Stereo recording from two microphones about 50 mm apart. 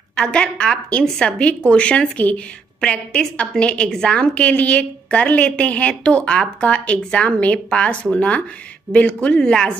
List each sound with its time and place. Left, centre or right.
0.1 s a woman's voice: centre